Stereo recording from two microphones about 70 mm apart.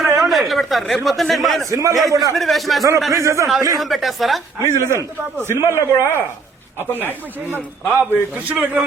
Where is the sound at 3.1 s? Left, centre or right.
Right.